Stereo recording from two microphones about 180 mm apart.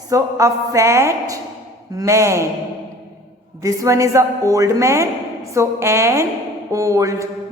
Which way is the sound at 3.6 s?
15° right (ahead or behind).